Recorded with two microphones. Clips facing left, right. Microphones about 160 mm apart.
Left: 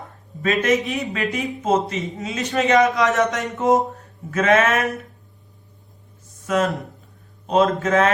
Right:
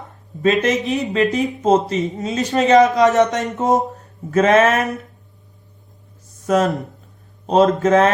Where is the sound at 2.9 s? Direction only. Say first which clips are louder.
Right 5 dB; 20° right (ahead or behind).